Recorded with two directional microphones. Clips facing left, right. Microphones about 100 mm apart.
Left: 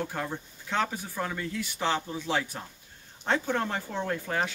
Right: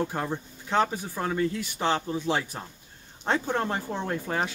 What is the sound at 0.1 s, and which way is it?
A man's voice, 25° right (ahead or behind).